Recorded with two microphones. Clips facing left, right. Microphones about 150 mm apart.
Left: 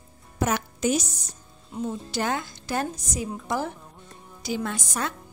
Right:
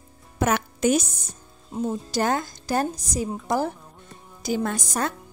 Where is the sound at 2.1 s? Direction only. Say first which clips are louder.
Right 5 dB; 40° right (ahead or behind).